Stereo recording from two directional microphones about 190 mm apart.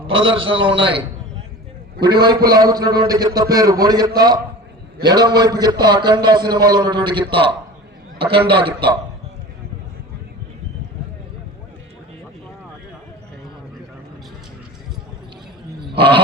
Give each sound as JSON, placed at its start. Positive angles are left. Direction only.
{"t": 0.2, "sound": "a man's voice", "side_deg": -25}
{"t": 8.6, "sound": "a man's voice", "side_deg": -25}
{"t": 16.0, "sound": "a man's voice", "side_deg": -25}